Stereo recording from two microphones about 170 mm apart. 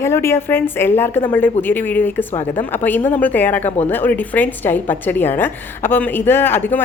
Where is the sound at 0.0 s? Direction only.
15° left (ahead or behind).